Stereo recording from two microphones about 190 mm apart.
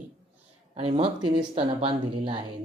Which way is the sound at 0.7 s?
30° right (ahead or behind).